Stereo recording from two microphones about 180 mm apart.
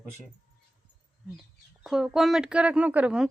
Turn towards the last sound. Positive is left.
turn(degrees=-5)  # may be behind; listen again after turning